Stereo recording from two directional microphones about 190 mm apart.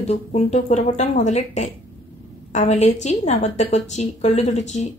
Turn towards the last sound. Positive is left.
turn(degrees=35)  # may be behind; listen again after turning